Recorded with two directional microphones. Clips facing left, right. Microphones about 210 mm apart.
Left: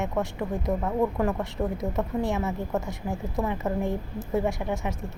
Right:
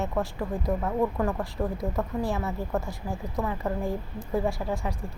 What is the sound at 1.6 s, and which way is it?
A woman's voice, 15° left (ahead or behind).